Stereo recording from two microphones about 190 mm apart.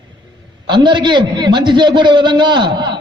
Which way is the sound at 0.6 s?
25° right (ahead or behind).